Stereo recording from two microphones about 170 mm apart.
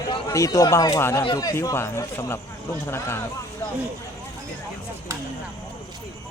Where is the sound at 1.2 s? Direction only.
25° left (ahead or behind).